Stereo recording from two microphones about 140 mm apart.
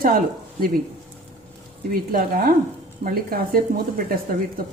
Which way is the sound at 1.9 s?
90° right.